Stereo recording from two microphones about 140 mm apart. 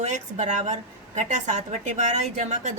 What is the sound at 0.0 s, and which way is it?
A woman's voice, 55° right (ahead or behind).